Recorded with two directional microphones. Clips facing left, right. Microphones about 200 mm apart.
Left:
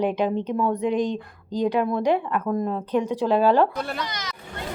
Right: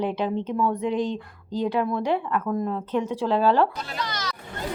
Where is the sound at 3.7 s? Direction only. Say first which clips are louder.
Left 6 dB; 55° left (ahead or behind).